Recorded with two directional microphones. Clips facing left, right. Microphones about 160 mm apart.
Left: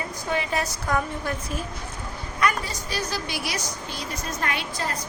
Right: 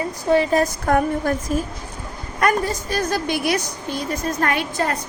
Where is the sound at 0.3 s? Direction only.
35° right (ahead or behind).